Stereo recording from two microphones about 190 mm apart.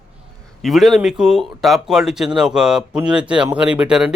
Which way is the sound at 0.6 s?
Centre (ahead or behind).